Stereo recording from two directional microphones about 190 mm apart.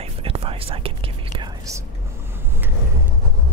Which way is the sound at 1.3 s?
15° right (ahead or behind).